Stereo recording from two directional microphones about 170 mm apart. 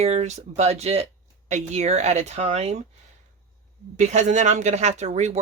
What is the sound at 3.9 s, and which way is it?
Speech, 45° right (ahead or behind).